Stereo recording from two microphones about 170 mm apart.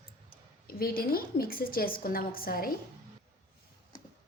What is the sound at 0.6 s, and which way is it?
A woman's voice, 60° left (ahead or behind).